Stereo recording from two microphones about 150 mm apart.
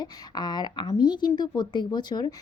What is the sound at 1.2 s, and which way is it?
Speech, 30° left (ahead or behind).